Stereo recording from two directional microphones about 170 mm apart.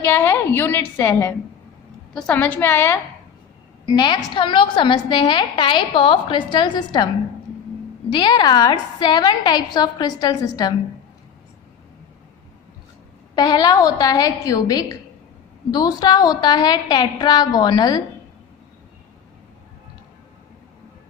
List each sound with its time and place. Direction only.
0.0 s a woman's voice: 10° left (ahead or behind)
3.8 s a woman's voice: 25° left (ahead or behind)
8.1 s a woman's voice: 25° left (ahead or behind)
13.3 s a woman's voice: 25° left (ahead or behind)